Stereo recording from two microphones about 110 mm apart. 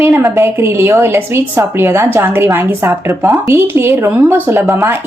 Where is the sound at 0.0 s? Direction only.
25° right (ahead or behind).